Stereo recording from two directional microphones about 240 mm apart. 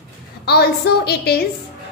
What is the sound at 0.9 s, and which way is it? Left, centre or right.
Speech, left.